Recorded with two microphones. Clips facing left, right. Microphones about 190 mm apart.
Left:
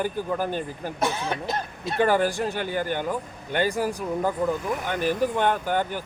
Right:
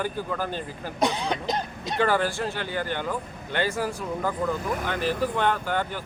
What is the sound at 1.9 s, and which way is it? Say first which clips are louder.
Speech: left 2 dB; 15° left (ahead or behind).